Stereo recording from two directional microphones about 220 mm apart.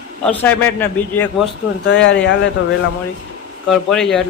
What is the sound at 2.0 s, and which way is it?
Speech, 55° left (ahead or behind).